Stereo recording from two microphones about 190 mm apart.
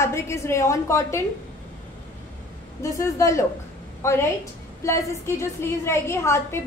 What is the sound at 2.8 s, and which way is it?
A woman's voice, 15° left (ahead or behind).